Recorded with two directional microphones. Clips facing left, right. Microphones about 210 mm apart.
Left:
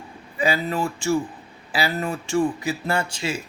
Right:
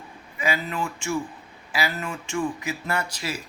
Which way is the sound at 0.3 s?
35° left (ahead or behind).